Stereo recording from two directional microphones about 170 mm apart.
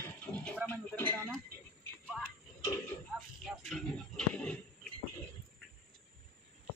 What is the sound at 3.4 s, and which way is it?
Speech, centre (ahead or behind).